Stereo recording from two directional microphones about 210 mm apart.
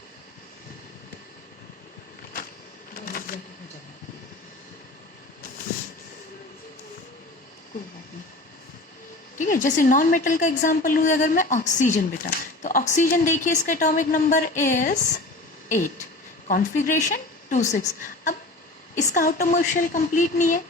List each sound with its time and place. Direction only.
2.9 s a sound: 40° left (ahead or behind)
9.4 s a woman's voice: 40° left (ahead or behind)
16.5 s a woman's voice: 40° left (ahead or behind)